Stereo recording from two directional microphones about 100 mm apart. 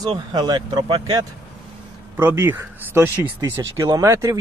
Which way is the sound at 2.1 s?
25° right (ahead or behind).